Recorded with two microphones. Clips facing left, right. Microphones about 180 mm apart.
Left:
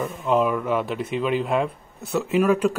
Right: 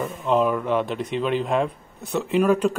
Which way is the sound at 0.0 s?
5° left (ahead or behind).